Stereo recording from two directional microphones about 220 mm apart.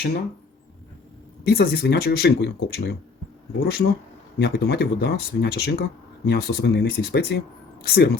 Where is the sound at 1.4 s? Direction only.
45° left (ahead or behind).